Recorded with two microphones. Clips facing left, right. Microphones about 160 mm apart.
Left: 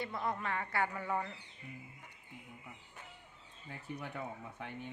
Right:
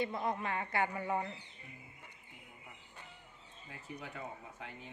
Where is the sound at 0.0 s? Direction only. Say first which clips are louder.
Right 2 dB; 20° right (ahead or behind).